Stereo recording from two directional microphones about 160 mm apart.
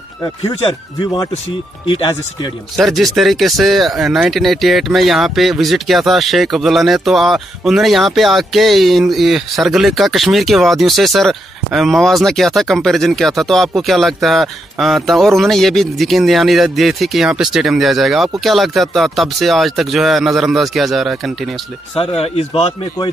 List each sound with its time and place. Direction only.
0.4 s speech: 30° left (ahead or behind)
2.7 s speech: centre (ahead or behind)
21.9 s speech: 35° left (ahead or behind)